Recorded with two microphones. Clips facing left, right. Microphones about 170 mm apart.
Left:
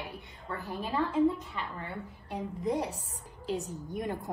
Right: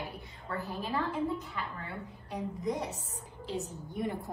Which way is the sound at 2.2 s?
30° left (ahead or behind).